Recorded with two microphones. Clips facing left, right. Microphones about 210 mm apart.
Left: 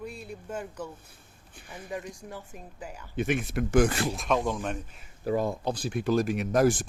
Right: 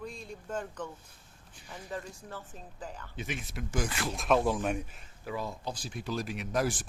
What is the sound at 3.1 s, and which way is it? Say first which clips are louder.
Speech: left 13 dB; 55° left (ahead or behind).